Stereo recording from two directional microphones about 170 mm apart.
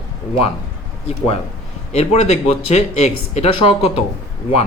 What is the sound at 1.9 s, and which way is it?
Speech, 40° left (ahead or behind).